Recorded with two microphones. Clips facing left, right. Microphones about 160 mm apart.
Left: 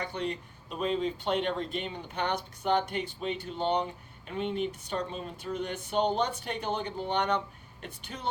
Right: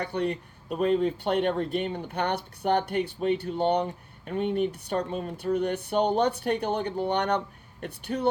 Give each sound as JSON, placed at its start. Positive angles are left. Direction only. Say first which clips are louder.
{"t": 0.0, "sound": "speech", "louder": "right 5 dB", "side_deg": -65}